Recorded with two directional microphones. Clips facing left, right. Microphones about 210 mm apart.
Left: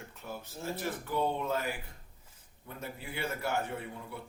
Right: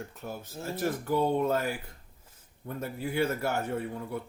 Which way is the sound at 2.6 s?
45° right (ahead or behind).